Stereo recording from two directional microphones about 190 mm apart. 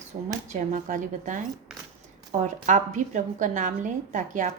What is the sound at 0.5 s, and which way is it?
Speech, 40° right (ahead or behind).